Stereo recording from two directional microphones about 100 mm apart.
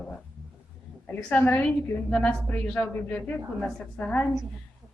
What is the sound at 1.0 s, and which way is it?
A woman's voice, 20° left (ahead or behind).